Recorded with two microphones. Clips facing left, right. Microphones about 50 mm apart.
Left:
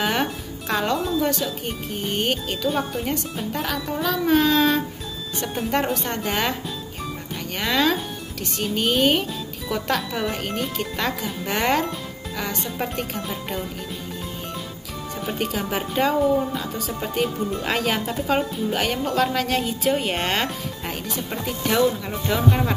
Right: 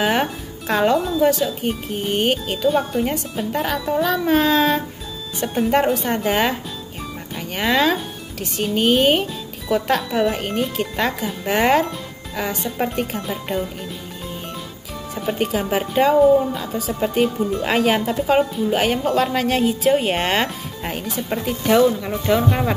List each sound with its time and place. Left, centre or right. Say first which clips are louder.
0.0 s speech: right 4 dB; centre
2.7 s speech: right 5 dB; centre
7.5 s speech: right 3 dB; centre
15.3 s speech: right 5 dB; centre